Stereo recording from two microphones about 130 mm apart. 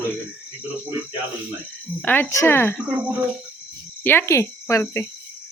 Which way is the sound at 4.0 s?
15° left (ahead or behind).